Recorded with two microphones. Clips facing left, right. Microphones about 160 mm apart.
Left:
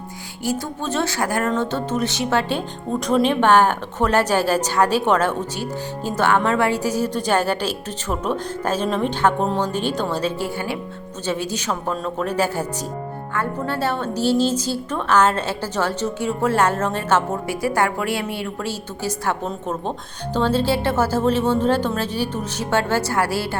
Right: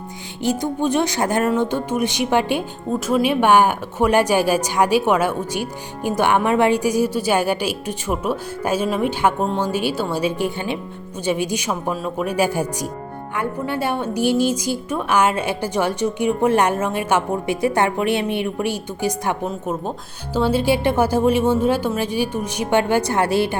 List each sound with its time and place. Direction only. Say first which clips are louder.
0.4 s a woman's voice: right 5 dB; 15° right (ahead or behind)